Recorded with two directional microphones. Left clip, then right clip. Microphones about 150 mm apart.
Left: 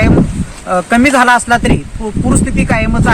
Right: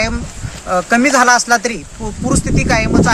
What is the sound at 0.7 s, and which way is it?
Speech, 20° right (ahead or behind).